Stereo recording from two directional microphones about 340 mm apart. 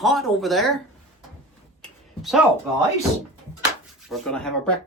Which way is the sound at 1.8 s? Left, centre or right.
Centre.